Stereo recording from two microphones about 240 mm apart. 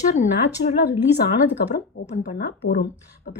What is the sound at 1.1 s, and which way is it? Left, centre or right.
A woman's voice, left.